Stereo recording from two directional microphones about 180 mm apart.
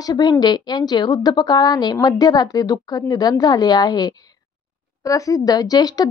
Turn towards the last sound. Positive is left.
turn(degrees=20)  # may be behind; listen again after turning